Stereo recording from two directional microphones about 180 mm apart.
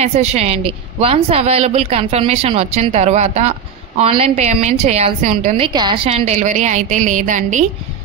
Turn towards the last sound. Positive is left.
turn(degrees=-45)  # may be behind; listen again after turning